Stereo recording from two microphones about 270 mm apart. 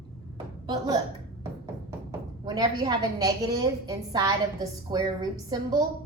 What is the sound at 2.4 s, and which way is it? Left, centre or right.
A woman's voice, centre.